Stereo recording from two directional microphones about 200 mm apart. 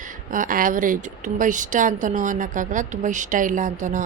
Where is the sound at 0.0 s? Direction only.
40° right (ahead or behind).